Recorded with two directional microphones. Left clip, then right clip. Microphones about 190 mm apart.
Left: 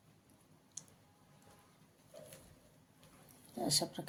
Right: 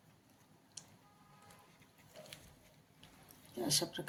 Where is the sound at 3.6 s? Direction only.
40° left (ahead or behind).